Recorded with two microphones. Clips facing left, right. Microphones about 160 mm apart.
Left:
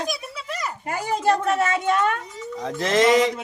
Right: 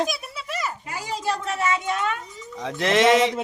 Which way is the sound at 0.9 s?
50° left (ahead or behind).